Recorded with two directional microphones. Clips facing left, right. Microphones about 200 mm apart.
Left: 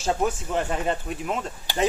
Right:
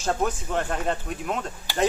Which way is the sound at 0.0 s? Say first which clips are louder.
Left 1 dB; 5° left (ahead or behind).